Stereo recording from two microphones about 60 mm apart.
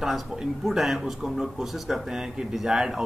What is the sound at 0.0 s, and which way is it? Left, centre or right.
Speech, centre.